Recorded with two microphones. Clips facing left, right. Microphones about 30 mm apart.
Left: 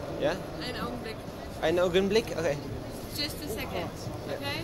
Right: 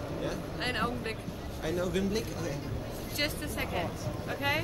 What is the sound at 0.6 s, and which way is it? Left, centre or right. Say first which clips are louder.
Speech: right 3 dB; right.